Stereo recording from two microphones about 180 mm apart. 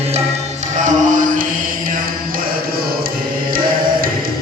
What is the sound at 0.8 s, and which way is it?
Music, 45° right (ahead or behind).